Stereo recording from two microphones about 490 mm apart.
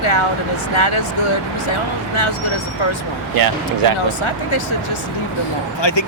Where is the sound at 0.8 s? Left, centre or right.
Left.